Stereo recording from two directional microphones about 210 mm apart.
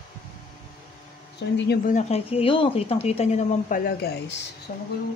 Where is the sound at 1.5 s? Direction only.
55° left (ahead or behind).